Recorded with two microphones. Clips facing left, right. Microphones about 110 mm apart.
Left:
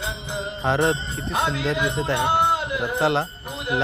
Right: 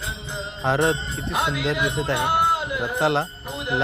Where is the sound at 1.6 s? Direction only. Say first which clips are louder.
Even; centre (ahead or behind).